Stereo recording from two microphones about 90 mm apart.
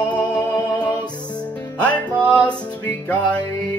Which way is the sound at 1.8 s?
15° left (ahead or behind).